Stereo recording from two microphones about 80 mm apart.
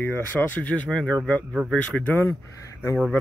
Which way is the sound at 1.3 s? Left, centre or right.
Centre.